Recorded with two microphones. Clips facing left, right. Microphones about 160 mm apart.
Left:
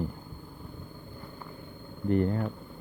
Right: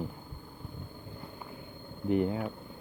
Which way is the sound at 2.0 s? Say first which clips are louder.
Left 2 dB; 5° right (ahead or behind).